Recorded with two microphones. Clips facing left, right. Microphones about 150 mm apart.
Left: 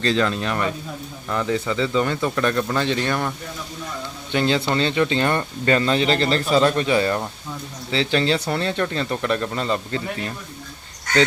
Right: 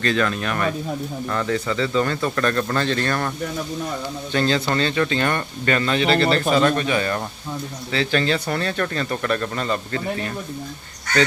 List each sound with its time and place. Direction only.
0.0 s speech: 25° left (ahead or behind)